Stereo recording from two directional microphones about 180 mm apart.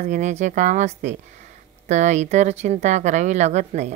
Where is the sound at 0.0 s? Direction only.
40° right (ahead or behind).